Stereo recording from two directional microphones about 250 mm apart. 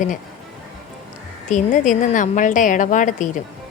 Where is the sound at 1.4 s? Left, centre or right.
Left.